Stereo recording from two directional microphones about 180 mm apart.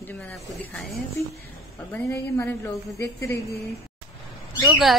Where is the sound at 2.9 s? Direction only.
15° left (ahead or behind).